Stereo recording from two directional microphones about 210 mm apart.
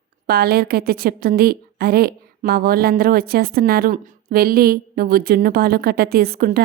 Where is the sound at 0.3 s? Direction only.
45° right (ahead or behind).